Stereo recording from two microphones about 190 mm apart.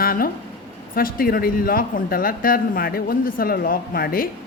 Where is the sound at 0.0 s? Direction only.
50° left (ahead or behind).